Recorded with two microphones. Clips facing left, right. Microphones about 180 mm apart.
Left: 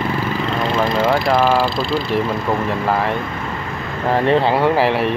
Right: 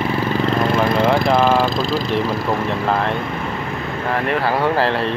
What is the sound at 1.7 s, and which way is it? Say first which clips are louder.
Speech: even; 40° right (ahead or behind).